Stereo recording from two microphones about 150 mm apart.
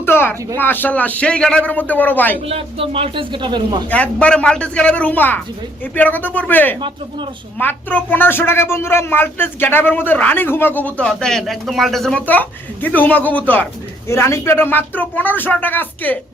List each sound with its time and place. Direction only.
0.0 s speech: 15° left (ahead or behind)
2.5 s speech: 40° right (ahead or behind)
3.8 s speech: 10° left (ahead or behind)